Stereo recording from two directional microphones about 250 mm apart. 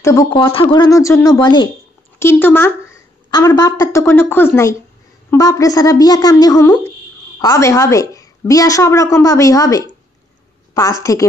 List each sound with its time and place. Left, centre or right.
0.0 s a woman's voice: centre